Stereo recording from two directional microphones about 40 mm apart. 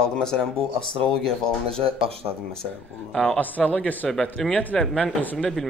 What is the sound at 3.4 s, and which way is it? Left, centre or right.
Speech, left.